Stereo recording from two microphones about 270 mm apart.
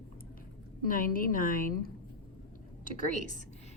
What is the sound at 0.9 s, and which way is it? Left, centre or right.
Speech, left.